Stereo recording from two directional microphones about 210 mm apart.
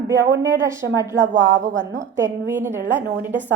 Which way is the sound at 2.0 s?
10° right (ahead or behind).